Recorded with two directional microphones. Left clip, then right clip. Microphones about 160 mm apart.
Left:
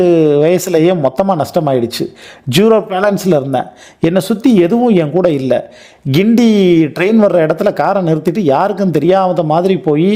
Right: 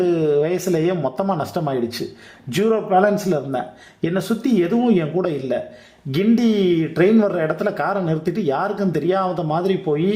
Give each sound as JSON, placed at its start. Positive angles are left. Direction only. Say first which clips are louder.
{"t": 0.0, "sound": "speech", "louder": "left 9 dB", "side_deg": 40}
{"t": 2.5, "sound": "speech", "louder": "left 7 dB", "side_deg": 50}